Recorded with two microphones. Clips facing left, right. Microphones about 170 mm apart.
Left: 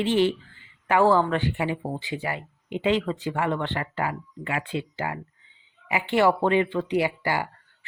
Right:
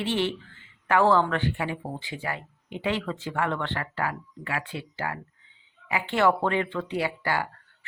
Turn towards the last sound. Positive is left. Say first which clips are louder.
# left 3 dB
turn(degrees=10)  # may be behind; listen again after turning